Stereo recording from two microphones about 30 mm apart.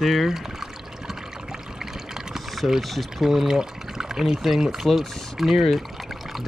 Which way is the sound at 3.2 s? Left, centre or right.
Centre.